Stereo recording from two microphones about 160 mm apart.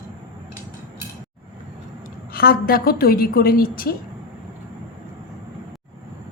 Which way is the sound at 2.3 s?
70° left (ahead or behind).